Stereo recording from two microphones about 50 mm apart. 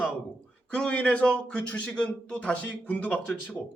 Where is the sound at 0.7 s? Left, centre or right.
Left.